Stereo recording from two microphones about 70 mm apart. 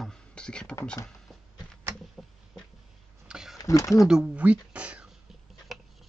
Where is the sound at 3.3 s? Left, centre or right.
Centre.